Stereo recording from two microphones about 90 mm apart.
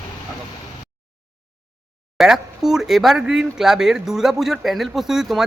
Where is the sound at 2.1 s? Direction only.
5° right (ahead or behind).